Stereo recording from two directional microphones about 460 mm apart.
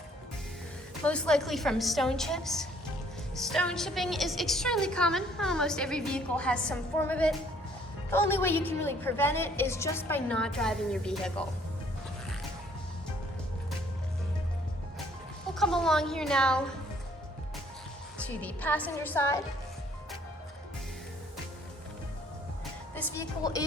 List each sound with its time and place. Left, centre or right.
1.0 s a woman's voice: centre
15.5 s a woman's voice: centre
18.2 s a woman's voice: centre
23.0 s speech: centre